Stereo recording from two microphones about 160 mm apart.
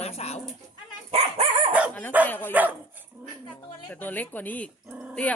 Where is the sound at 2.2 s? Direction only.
10° left (ahead or behind).